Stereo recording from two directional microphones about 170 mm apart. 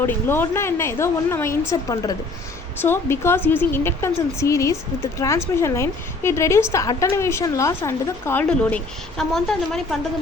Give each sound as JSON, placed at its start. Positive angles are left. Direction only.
{"t": 0.0, "sound": "a woman's voice", "side_deg": 15}